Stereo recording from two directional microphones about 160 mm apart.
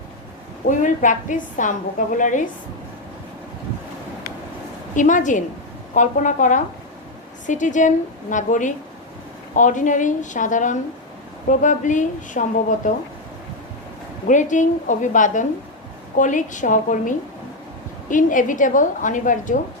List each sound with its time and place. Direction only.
0.8 s a woman's voice: 50° left (ahead or behind)
4.9 s a woman's voice: 50° left (ahead or behind)
14.3 s a woman's voice: 50° left (ahead or behind)